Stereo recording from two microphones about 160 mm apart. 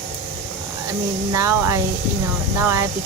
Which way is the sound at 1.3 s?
20° right (ahead or behind).